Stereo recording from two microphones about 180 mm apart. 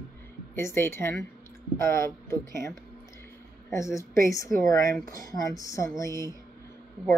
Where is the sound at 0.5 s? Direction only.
15° left (ahead or behind).